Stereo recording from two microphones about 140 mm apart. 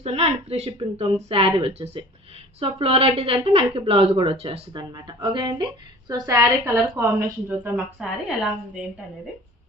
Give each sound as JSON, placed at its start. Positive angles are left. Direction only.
{"t": 0.0, "sound": "a woman's voice", "side_deg": -50}